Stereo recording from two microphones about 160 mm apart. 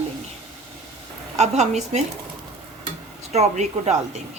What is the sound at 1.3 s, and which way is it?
Speech, 45° right (ahead or behind).